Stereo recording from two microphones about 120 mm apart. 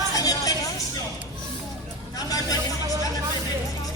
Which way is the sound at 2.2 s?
30° left (ahead or behind).